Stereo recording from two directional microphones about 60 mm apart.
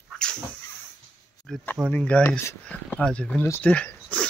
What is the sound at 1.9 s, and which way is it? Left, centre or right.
Speech, left.